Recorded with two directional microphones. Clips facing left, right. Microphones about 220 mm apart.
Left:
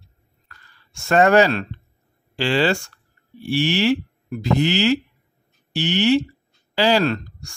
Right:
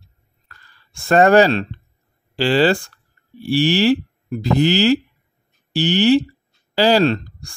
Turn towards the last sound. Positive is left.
turn(degrees=-35)  # may be behind; listen again after turning